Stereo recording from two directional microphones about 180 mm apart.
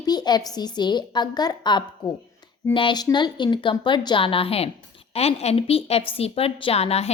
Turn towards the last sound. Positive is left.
turn(degrees=35)  # may be behind; listen again after turning